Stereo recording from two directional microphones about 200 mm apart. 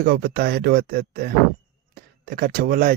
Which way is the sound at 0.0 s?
45° right (ahead or behind).